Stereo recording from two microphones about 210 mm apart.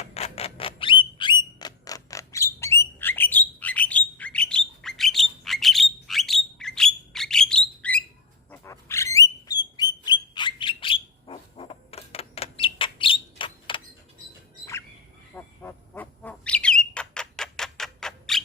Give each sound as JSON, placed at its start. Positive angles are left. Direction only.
{"t": 0.0, "sound": "a sound", "side_deg": 30}
{"t": 8.4, "sound": "bird", "side_deg": 10}
{"t": 15.4, "sound": "bird", "side_deg": 10}